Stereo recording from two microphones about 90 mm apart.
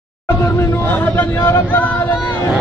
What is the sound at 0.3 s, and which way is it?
Speech, 25° left (ahead or behind).